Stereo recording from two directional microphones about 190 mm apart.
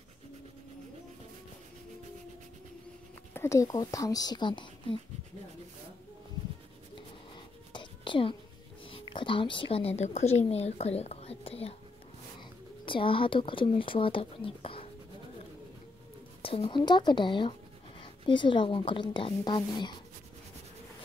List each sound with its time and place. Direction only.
3.3 s speech: 15° left (ahead or behind)
7.0 s a sound: 25° left (ahead or behind)
8.8 s a woman's voice: 25° left (ahead or behind)
12.8 s speech: 25° left (ahead or behind)
16.4 s speech: 30° left (ahead or behind)